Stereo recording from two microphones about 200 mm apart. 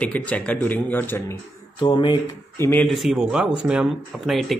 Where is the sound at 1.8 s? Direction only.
25° left (ahead or behind).